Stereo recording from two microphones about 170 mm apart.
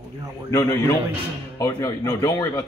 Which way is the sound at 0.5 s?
15° left (ahead or behind).